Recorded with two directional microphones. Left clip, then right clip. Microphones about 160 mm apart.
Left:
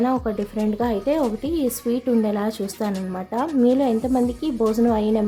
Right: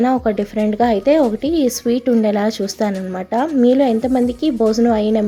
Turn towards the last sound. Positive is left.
turn(degrees=-15)  # may be behind; listen again after turning